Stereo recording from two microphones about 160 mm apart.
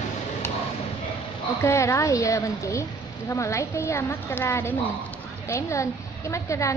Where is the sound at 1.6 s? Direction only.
20° left (ahead or behind).